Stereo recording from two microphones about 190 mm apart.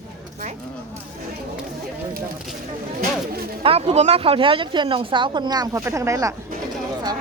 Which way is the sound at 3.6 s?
30° right (ahead or behind).